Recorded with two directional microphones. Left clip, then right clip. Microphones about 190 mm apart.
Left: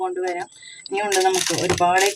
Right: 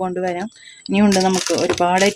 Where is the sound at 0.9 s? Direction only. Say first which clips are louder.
Right 2 dB; 55° right (ahead or behind).